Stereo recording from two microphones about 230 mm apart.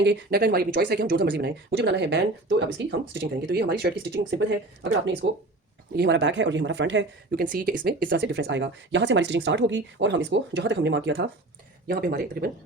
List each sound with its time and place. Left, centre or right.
0.0 s speech: right